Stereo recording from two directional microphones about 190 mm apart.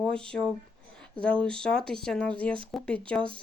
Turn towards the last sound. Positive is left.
turn(degrees=5)  # may be behind; listen again after turning